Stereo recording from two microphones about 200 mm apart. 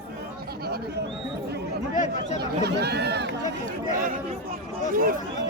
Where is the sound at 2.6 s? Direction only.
55° right (ahead or behind).